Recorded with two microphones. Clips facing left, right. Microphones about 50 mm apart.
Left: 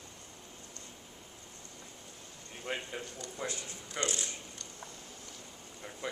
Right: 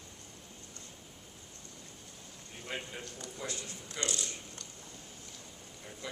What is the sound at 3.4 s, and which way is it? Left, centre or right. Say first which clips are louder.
Speech: left 2 dB; left.